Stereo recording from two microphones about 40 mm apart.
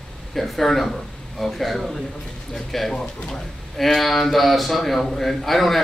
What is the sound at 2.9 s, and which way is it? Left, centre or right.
Speech, centre.